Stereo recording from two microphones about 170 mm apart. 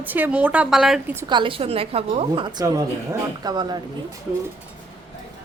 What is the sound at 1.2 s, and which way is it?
A woman's voice, 30° right (ahead or behind).